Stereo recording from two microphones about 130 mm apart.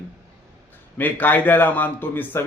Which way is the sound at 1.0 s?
15° left (ahead or behind).